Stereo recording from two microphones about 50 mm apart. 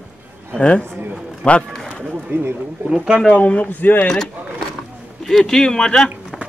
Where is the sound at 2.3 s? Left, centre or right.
Right.